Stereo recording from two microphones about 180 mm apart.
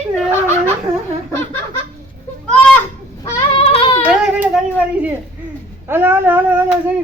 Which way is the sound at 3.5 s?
35° left (ahead or behind).